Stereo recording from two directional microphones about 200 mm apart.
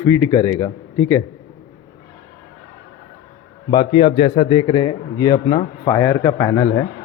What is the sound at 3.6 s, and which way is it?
A man's voice, 25° left (ahead or behind).